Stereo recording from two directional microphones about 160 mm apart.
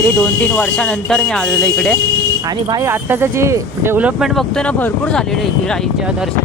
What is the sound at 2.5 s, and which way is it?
Speech, 25° right (ahead or behind).